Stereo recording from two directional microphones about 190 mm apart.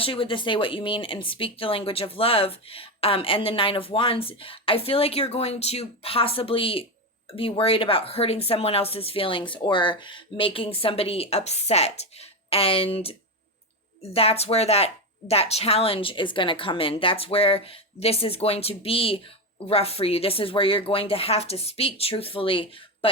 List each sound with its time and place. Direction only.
0.0 s speech: 30° left (ahead or behind)